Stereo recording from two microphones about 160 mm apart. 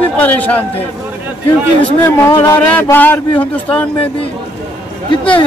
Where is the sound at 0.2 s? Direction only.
10° left (ahead or behind).